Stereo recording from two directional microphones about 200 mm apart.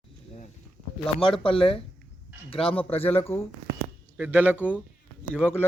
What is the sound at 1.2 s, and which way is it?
Speech, 25° left (ahead or behind).